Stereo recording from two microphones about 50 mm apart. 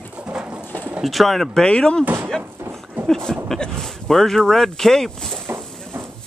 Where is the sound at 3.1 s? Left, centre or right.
Centre.